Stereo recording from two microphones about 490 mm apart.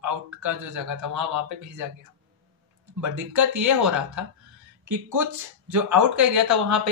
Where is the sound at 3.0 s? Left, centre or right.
Right.